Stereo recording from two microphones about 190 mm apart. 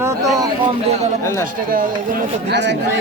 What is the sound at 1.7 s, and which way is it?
Speech, 50° right (ahead or behind).